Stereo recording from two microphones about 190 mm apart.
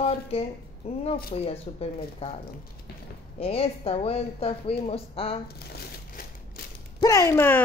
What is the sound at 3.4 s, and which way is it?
A woman's voice, 30° left (ahead or behind).